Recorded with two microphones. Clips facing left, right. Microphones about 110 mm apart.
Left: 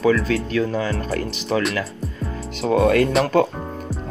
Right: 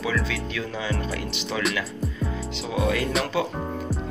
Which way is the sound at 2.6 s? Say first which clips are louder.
Left 9 dB; 55° left (ahead or behind).